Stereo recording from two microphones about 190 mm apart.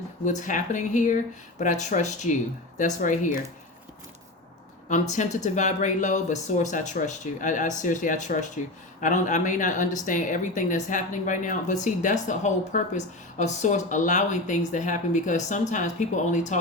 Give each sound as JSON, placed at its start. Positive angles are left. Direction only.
{"t": 0.3, "sound": "speech", "side_deg": 40}
{"t": 5.1, "sound": "speech", "side_deg": 40}